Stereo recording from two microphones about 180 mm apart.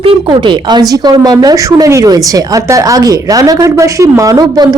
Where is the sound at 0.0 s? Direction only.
25° right (ahead or behind).